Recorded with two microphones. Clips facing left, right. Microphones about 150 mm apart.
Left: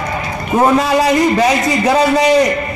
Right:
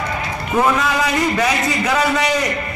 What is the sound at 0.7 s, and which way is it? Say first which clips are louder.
A man's voice: left 6 dB; 35° left (ahead or behind).